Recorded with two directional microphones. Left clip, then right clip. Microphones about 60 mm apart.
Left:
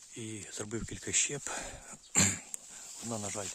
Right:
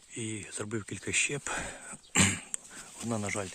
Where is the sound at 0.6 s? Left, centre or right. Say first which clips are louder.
Right 2 dB; left.